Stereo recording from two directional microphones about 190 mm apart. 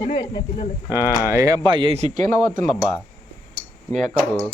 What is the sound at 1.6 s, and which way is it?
Speech, 25° right (ahead or behind).